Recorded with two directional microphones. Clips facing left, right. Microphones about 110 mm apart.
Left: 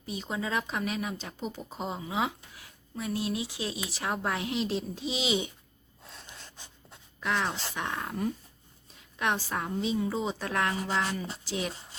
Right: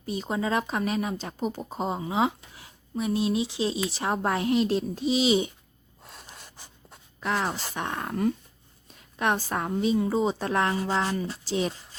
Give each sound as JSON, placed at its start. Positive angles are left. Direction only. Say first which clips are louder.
{"t": 0.0, "sound": "speech", "louder": "right 5 dB", "side_deg": -45}
{"t": 6.1, "sound": "gasp", "louder": "right 2 dB", "side_deg": -10}
{"t": 7.2, "sound": "speech", "louder": "right 2 dB", "side_deg": -40}
{"t": 9.1, "sound": "speech", "louder": "right 4 dB", "side_deg": -45}